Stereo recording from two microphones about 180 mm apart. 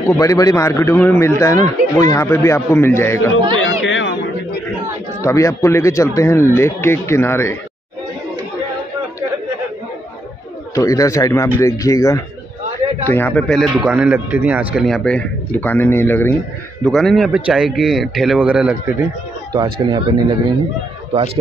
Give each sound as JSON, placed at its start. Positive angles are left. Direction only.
{"t": 0.2, "sound": "a man's voice", "side_deg": 20}
{"t": 3.6, "sound": "a sound", "side_deg": 90}
{"t": 5.2, "sound": "a man's voice", "side_deg": 15}
{"t": 10.7, "sound": "a man's voice", "side_deg": 15}
{"t": 19.5, "sound": "speech", "side_deg": -25}